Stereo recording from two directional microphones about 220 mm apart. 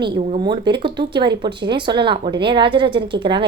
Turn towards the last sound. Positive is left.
turn(degrees=-20)  # may be behind; listen again after turning